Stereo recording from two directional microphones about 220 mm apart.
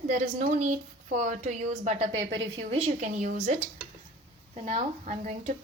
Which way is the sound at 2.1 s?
55° right (ahead or behind).